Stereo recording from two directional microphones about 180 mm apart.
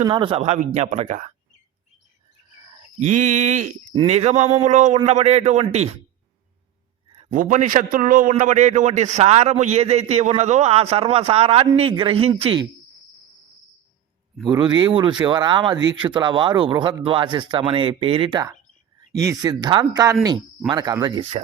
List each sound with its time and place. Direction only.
0.0 s a man's voice: 30° right (ahead or behind)
3.0 s a man's voice: 45° right (ahead or behind)
7.3 s a man's voice: 45° right (ahead or behind); by 12.6 s 25° right (ahead or behind)
14.4 s speech: 25° right (ahead or behind)
18.9 s speech: 15° right (ahead or behind)